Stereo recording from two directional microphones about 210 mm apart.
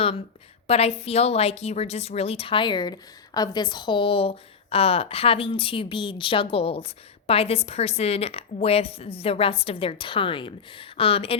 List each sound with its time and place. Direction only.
0.7 s a woman's voice: 30° left (ahead or behind)